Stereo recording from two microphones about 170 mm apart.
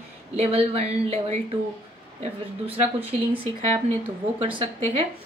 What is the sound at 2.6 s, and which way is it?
Speech, 35° right (ahead or behind).